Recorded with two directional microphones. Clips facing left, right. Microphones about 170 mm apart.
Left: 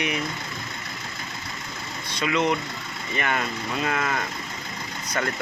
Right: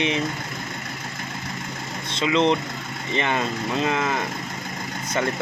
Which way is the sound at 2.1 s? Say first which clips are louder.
Right 4 dB; 25° right (ahead or behind).